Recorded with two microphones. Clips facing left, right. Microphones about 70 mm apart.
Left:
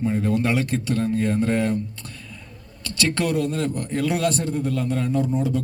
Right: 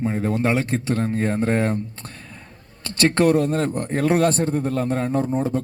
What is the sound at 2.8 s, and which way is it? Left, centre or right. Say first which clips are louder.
A man's voice: right 6 dB; right.